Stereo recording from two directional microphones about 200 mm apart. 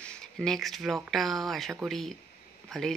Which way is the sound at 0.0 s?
5° left (ahead or behind).